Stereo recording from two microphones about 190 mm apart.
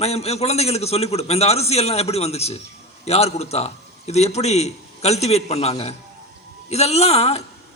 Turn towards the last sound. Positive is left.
turn(degrees=35)  # may be behind; listen again after turning